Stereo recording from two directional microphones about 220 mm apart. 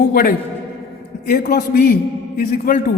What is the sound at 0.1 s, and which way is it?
A man's voice, 45° left (ahead or behind).